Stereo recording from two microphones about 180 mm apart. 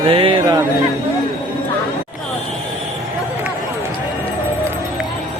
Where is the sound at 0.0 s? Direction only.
30° right (ahead or behind).